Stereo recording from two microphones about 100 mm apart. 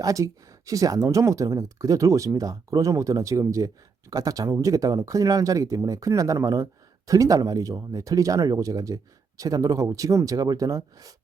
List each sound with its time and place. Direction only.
0.0 s speech: 35° right (ahead or behind)